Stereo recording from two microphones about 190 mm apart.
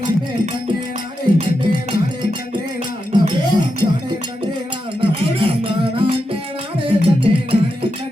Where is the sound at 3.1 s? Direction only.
25° right (ahead or behind).